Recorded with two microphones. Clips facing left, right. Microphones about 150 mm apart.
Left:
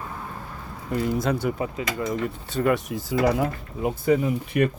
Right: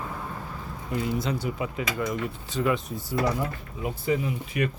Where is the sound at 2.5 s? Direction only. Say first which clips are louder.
Left 3 dB; 60° left (ahead or behind); by 3.5 s 90° left.